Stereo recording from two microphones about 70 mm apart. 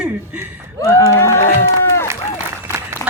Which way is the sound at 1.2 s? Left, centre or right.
Left.